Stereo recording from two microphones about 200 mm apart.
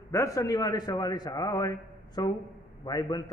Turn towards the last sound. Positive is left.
turn(degrees=20)  # may be behind; listen again after turning